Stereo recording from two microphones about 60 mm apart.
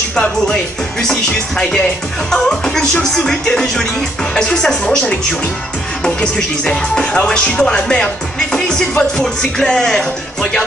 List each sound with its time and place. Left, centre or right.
0.1 s speech: centre
1.6 s speech: centre